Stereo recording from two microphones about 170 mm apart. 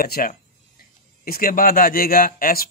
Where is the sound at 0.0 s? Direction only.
60° left (ahead or behind).